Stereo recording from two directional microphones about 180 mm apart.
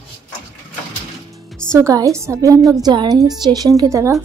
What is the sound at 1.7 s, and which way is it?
A woman's voice, 15° right (ahead or behind).